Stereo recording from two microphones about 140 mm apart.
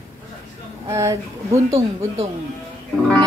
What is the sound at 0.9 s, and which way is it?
Speech, 20° right (ahead or behind).